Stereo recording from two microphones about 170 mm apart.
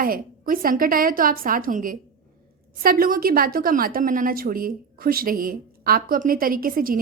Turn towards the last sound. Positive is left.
turn(degrees=-55)  # may be behind; listen again after turning